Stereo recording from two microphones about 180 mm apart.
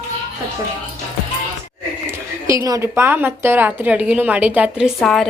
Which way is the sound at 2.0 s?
15° right (ahead or behind).